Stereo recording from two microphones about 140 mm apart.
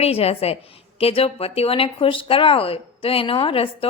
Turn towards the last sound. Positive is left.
turn(degrees=40)  # may be behind; listen again after turning